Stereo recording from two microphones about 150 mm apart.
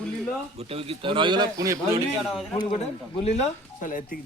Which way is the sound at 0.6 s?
40° right (ahead or behind).